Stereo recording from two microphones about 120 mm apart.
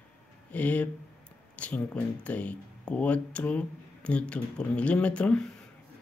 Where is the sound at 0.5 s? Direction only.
10° left (ahead or behind).